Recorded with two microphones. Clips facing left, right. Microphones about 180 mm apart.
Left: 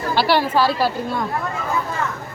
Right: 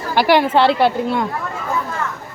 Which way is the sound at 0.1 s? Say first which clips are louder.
Right 4 dB; 15° right (ahead or behind).